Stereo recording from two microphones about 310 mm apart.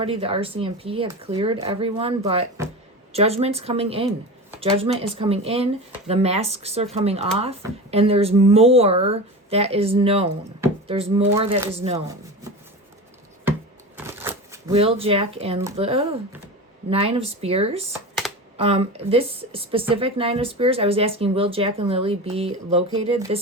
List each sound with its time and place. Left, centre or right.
0.0 s speech: centre
13.9 s a sound: centre
14.7 s speech: centre